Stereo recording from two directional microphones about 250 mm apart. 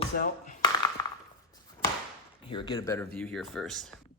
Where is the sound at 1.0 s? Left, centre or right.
Centre.